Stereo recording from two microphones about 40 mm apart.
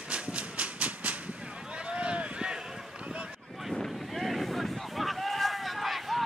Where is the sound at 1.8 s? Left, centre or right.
Right.